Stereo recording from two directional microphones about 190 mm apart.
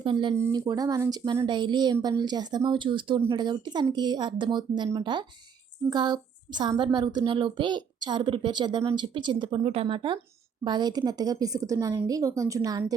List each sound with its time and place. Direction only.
0.0 s speech: 25° right (ahead or behind)